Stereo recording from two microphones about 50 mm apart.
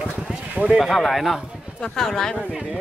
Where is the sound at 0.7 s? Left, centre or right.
Centre.